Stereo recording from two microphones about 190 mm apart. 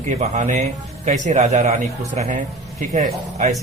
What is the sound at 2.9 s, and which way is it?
Speech, 35° right (ahead or behind).